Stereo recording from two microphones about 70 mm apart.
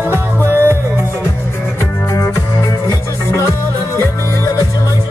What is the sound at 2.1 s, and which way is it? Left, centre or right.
Music, left.